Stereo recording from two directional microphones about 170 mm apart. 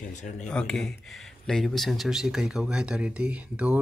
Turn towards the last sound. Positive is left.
turn(degrees=-5)  # may be behind; listen again after turning